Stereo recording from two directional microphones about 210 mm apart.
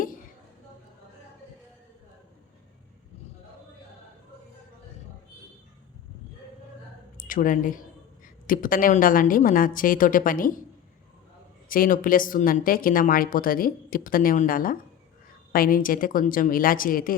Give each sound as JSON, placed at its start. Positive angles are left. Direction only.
{"t": 7.2, "sound": "speech", "side_deg": 40}
{"t": 11.7, "sound": "speech", "side_deg": 40}